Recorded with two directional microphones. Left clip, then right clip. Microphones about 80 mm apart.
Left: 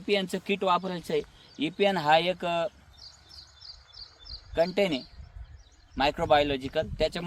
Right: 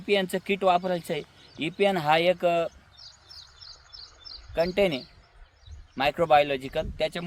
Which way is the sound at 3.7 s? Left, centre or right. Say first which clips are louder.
Right 1 dB; right.